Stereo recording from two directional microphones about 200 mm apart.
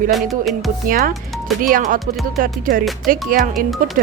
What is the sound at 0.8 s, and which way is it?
Speech, 45° right (ahead or behind).